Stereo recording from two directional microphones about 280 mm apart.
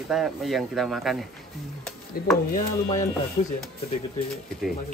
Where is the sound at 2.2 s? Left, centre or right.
Left.